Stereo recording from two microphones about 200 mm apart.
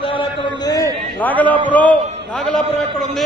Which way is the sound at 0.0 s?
25° left (ahead or behind).